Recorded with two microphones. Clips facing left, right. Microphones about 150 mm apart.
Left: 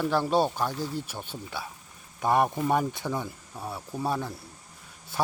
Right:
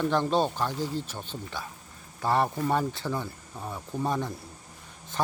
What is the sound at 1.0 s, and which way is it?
Speech, 10° left (ahead or behind).